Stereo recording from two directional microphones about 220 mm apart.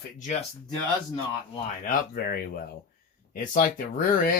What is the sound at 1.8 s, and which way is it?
Speech, 45° left (ahead or behind).